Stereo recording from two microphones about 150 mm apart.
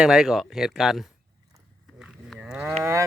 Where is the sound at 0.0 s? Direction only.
5° right (ahead or behind).